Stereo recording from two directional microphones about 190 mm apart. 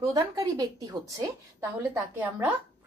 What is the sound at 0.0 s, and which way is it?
A woman's voice, 15° right (ahead or behind).